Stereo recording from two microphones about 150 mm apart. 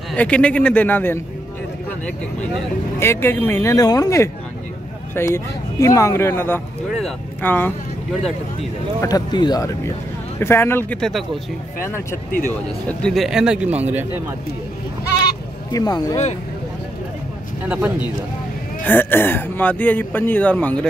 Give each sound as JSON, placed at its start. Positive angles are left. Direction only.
{"t": 0.1, "sound": "speech", "side_deg": 10}
{"t": 9.0, "sound": "speech", "side_deg": 25}
{"t": 10.4, "sound": "speech", "side_deg": 15}
{"t": 11.0, "sound": "a man's voice", "side_deg": 0}
{"t": 11.8, "sound": "speech", "side_deg": 15}
{"t": 12.8, "sound": "a man's voice", "side_deg": 5}
{"t": 15.2, "sound": "goose", "side_deg": 25}
{"t": 17.6, "sound": "speech", "side_deg": -10}
{"t": 18.9, "sound": "speech", "side_deg": 15}